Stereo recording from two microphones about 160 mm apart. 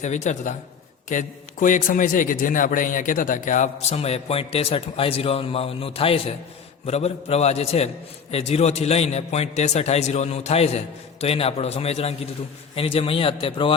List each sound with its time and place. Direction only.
0.0 s a man's voice: 45° left (ahead or behind)